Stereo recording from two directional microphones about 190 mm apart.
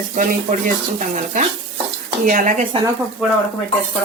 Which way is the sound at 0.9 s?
40° right (ahead or behind).